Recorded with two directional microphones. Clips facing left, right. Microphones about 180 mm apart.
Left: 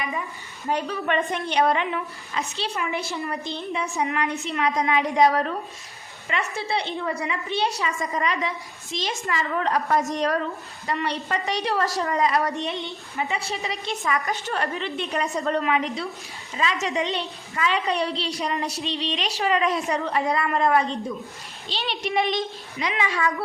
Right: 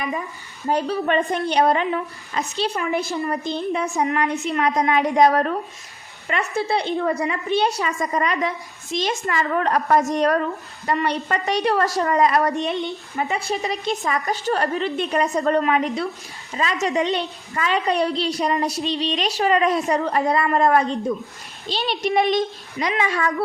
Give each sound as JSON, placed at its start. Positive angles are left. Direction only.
{"t": 0.6, "sound": "a woman's voice", "side_deg": -35}
{"t": 13.6, "sound": "a woman's voice", "side_deg": -40}